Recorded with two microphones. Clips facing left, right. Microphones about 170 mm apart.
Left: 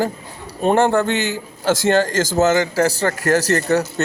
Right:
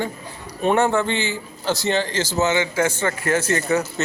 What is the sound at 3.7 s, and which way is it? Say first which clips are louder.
Speech: left 3 dB; 70° left (ahead or behind).